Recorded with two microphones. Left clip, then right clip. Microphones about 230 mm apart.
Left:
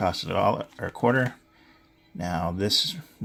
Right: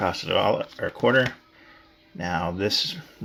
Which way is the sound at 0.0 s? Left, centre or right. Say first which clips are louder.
Right 1 dB; left.